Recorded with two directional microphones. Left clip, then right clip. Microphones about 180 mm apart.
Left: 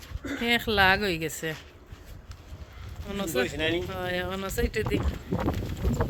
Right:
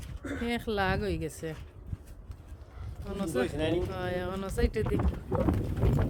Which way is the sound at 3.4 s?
35° left (ahead or behind).